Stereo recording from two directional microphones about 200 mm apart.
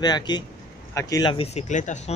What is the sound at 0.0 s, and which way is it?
A man's voice, 20° left (ahead or behind).